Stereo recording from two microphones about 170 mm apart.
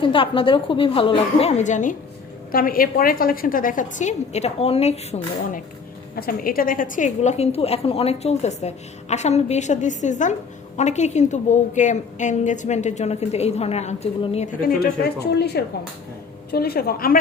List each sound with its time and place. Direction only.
0.0 s a woman's voice: 30° left (ahead or behind); by 2.0 s 50° left (ahead or behind)
2.5 s a woman's voice: 60° left (ahead or behind); by 5.5 s 40° left (ahead or behind)
6.1 s a woman's voice: 60° left (ahead or behind); by 14.5 s 40° left (ahead or behind)
14.6 s a woman's voice: 60° left (ahead or behind)